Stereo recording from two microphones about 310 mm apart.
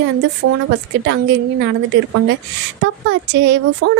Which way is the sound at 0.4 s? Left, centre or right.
Right.